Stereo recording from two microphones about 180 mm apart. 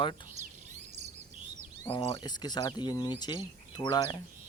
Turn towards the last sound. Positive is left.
turn(degrees=20)  # may be behind; listen again after turning